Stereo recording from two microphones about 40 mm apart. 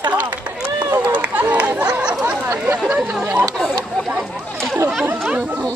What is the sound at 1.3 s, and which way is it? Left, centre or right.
Chatter, right.